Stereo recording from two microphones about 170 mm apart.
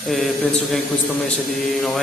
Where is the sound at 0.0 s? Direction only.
Centre (ahead or behind).